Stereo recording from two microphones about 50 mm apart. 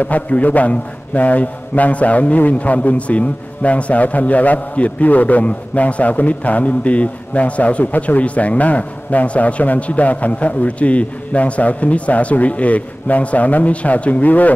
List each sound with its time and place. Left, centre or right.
0.0 s a man's voice: left